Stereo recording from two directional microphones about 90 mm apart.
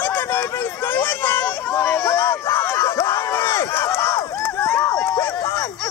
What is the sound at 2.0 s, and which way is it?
Crowd, 30° left (ahead or behind).